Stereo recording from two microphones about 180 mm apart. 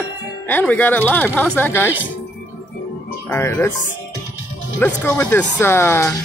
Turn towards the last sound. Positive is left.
turn(degrees=15)  # may be behind; listen again after turning